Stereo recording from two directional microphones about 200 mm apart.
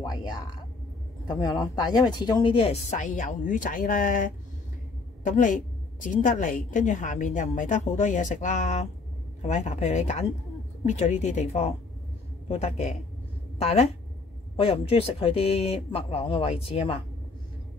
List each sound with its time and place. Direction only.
0.0 s a woman's voice: 20° left (ahead or behind)